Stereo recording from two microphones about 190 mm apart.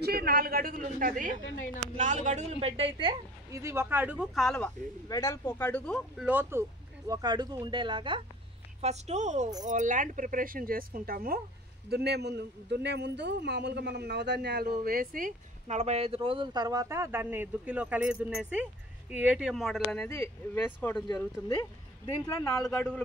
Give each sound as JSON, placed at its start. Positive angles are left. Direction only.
{"t": 0.0, "sound": "a woman's voice", "side_deg": -55}
{"t": 7.1, "sound": "a man's voice", "side_deg": -20}
{"t": 8.8, "sound": "a woman's voice", "side_deg": -35}
{"t": 21.5, "sound": "speech", "side_deg": 25}